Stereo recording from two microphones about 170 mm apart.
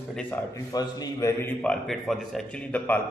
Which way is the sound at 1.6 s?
5° left (ahead or behind).